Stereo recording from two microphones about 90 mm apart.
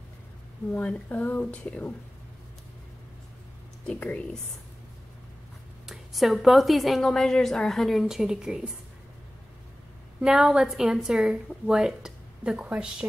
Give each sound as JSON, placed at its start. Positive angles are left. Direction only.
{"t": 0.7, "sound": "speech", "side_deg": 15}
{"t": 3.8, "sound": "speech", "side_deg": 15}
{"t": 5.9, "sound": "a woman's voice", "side_deg": 0}
{"t": 10.2, "sound": "a woman's voice", "side_deg": -5}